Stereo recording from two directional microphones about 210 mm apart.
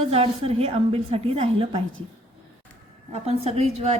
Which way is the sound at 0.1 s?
30° right (ahead or behind).